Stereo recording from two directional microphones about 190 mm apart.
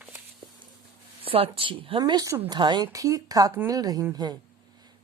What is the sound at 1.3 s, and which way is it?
A woman's voice, 30° right (ahead or behind).